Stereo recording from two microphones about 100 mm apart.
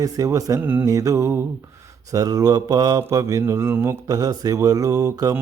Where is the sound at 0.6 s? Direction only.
15° right (ahead or behind).